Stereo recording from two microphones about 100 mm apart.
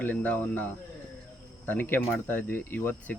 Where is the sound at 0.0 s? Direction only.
15° left (ahead or behind).